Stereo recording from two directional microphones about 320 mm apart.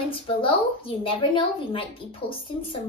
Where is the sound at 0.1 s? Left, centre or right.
Centre.